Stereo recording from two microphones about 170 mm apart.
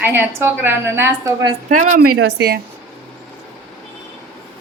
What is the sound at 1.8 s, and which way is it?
Speech, 55° right (ahead or behind).